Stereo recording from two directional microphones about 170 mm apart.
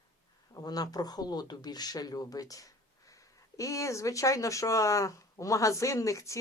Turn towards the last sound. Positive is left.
turn(degrees=20)  # may be behind; listen again after turning